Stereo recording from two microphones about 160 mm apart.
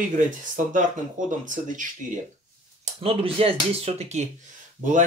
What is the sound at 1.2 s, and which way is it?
Speech, 50° right (ahead or behind).